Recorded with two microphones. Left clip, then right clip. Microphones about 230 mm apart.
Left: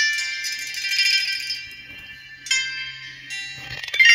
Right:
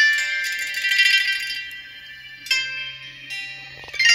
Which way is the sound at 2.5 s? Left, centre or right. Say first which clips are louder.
Even; right.